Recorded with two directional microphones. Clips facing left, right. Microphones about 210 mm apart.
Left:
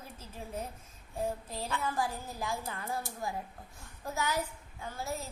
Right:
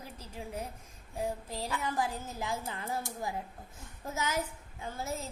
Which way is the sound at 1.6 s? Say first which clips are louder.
Even; 20° right (ahead or behind).